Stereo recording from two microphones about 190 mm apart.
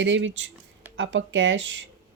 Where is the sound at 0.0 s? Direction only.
80° right.